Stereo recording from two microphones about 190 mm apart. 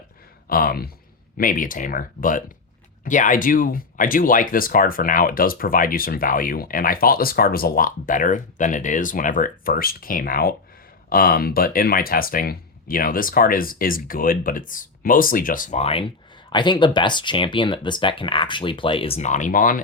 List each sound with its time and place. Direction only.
0.4 s speech: 50° left (ahead or behind)